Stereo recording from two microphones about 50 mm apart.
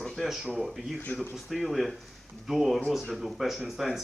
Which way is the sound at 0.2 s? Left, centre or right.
Centre.